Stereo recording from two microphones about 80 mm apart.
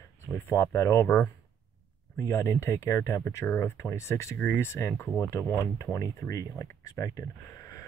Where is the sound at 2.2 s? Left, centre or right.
Left.